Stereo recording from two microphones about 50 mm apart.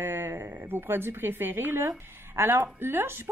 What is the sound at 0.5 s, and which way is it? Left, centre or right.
A woman's voice, right.